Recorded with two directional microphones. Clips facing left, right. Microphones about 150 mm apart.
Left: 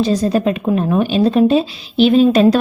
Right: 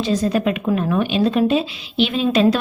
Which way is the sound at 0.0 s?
35° left (ahead or behind).